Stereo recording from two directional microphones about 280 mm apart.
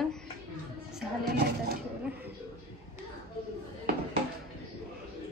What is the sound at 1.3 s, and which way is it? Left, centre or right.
Speech, right.